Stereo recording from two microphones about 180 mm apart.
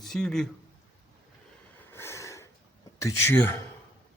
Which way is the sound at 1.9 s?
15° left (ahead or behind).